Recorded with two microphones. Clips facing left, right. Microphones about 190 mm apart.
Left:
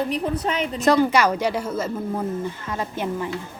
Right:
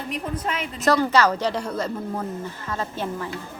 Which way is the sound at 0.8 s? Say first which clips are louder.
Left 1 dB; 15° left (ahead or behind).